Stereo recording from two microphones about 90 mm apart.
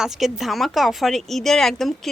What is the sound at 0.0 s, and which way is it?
Speech, centre (ahead or behind).